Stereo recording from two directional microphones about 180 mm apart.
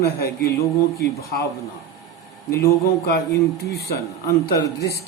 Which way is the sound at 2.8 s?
60° left (ahead or behind).